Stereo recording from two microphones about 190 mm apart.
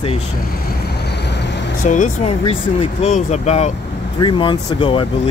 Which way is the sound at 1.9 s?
35° left (ahead or behind).